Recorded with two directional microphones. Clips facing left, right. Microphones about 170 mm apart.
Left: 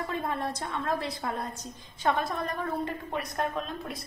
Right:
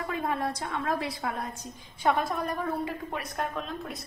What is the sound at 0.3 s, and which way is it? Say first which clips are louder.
Speech: right 2 dB; 15° right (ahead or behind).